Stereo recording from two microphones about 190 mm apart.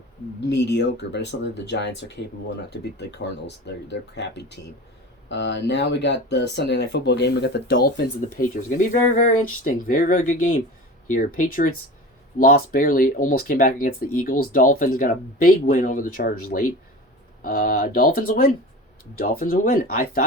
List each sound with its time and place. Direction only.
0.4 s speech: 65° left (ahead or behind); by 20.2 s 50° left (ahead or behind)